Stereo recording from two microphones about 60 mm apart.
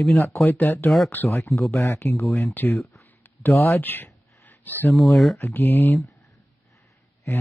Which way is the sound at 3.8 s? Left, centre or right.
Left.